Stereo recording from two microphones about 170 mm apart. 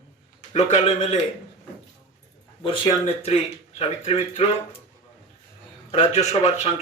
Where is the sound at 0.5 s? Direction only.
40° left (ahead or behind).